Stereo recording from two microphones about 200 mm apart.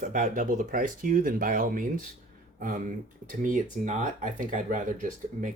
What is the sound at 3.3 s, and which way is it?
Speech, 40° right (ahead or behind).